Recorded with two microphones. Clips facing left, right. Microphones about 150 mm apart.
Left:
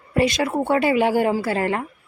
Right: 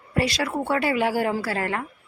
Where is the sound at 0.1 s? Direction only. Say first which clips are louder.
Left 5 dB; 20° left (ahead or behind).